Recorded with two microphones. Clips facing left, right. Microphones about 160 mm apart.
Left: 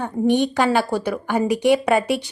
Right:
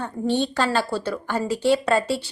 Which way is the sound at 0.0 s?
15° left (ahead or behind).